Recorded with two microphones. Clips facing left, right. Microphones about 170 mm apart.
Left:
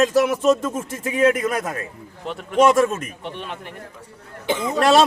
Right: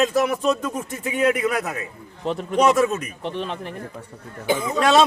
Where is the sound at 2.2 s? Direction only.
35° right (ahead or behind).